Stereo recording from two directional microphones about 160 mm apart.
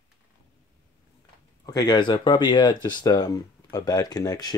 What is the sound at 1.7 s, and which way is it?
Speech, 25° left (ahead or behind).